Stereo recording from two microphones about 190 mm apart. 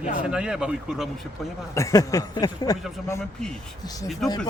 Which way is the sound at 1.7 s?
15° left (ahead or behind).